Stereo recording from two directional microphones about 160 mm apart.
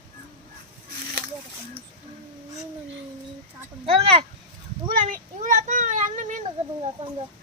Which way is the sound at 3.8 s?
35° right (ahead or behind).